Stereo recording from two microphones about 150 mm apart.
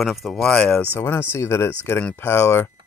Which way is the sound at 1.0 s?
15° left (ahead or behind).